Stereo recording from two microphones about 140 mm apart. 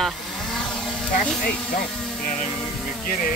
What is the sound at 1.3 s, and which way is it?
Music, 5° left (ahead or behind).